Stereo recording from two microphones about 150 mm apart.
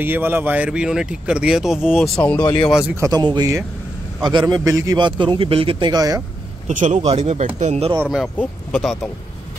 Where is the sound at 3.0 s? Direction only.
25° right (ahead or behind).